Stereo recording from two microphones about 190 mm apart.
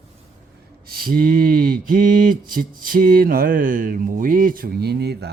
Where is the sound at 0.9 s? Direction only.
50° right (ahead or behind).